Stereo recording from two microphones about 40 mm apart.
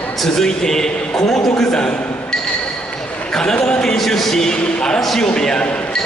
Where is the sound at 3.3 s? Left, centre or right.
Left.